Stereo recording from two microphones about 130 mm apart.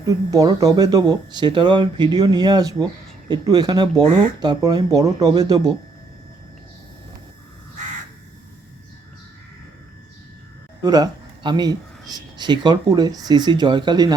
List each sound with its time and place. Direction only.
0.0 s speech: 25° right (ahead or behind)
10.8 s speech: 30° right (ahead or behind)